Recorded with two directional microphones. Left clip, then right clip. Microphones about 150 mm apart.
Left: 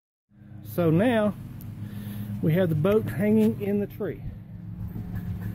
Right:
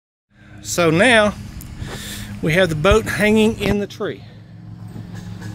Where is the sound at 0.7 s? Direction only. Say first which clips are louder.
Right 10 dB; 10° right (ahead or behind).